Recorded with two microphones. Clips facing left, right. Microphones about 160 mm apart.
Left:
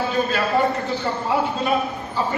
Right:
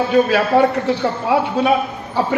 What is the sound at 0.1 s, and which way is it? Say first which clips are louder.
A man's voice: right 9 dB; 70° right (ahead or behind).